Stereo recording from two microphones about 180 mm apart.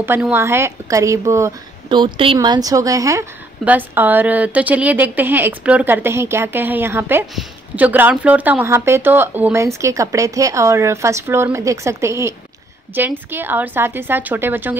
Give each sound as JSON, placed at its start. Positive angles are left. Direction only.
{"t": 0.0, "sound": "speech", "side_deg": -10}